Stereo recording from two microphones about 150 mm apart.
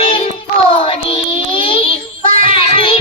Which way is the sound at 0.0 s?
40° left (ahead or behind).